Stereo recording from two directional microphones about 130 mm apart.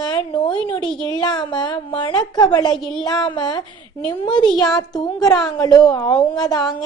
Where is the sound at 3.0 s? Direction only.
35° left (ahead or behind).